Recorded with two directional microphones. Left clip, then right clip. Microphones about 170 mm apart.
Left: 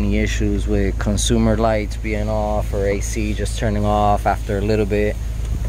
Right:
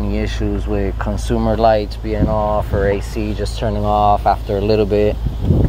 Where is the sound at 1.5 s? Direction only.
5° left (ahead or behind).